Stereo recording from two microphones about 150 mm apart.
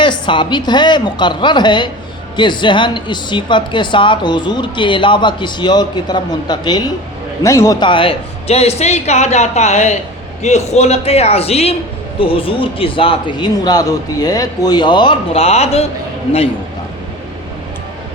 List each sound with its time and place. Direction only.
0.0 s a woman's voice: 30° left (ahead or behind)